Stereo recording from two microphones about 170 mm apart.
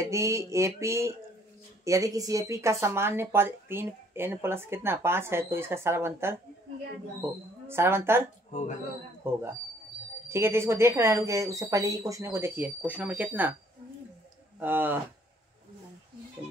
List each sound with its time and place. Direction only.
0.0 s speech: 15° right (ahead or behind)
7.6 s speech: 15° right (ahead or behind)
9.2 s speech: 15° right (ahead or behind)
14.6 s speech: 10° right (ahead or behind)